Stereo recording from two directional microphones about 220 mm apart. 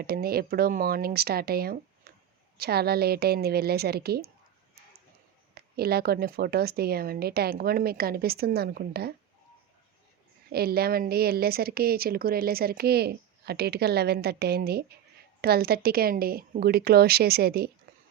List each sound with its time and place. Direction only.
0.0 s a woman's voice: 45° right (ahead or behind)
5.5 s a woman's voice: 45° right (ahead or behind)
10.5 s a woman's voice: 45° right (ahead or behind)